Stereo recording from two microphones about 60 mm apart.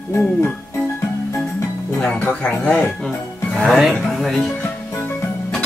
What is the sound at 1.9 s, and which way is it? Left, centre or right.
Speech, centre.